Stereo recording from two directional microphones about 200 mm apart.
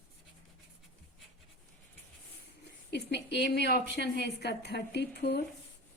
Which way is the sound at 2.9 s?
55° left (ahead or behind).